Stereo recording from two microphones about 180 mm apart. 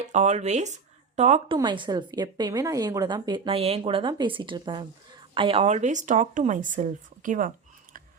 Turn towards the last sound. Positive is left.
turn(degrees=-45)  # may be behind; listen again after turning